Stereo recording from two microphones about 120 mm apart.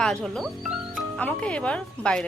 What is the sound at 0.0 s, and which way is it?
Speech, 5° left (ahead or behind).